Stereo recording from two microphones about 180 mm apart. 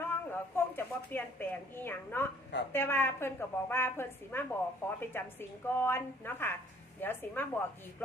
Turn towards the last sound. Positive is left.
turn(degrees=10)  # may be behind; listen again after turning